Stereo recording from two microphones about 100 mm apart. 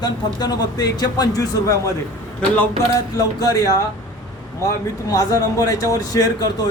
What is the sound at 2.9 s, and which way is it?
Speech, 35° left (ahead or behind).